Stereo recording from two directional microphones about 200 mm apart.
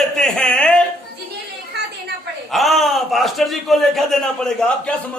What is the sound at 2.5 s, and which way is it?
A man's voice, centre (ahead or behind).